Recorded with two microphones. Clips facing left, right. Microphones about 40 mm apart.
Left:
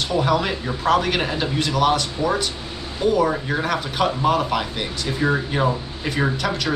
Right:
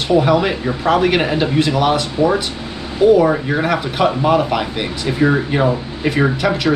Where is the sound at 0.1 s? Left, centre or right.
Centre.